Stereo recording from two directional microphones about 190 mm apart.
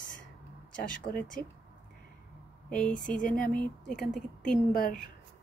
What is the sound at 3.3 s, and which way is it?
Speech, 10° left (ahead or behind).